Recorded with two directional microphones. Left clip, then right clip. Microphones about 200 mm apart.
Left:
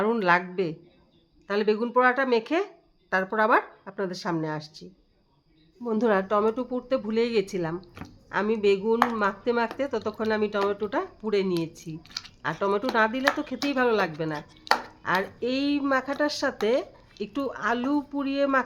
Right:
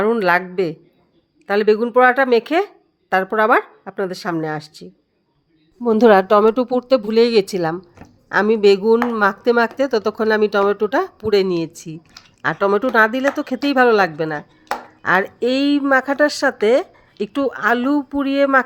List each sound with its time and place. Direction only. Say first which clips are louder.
0.0 s speech: right 7 dB; 35° right (ahead or behind)
5.8 s speech: right 12 dB; 45° right (ahead or behind)